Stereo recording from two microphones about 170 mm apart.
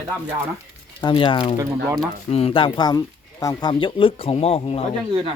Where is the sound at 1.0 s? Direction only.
30° left (ahead or behind).